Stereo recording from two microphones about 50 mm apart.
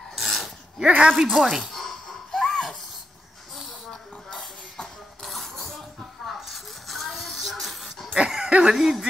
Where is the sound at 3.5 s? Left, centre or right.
Centre.